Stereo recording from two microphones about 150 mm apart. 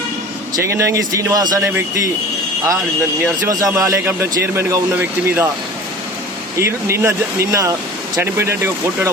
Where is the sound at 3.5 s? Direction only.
25° right (ahead or behind).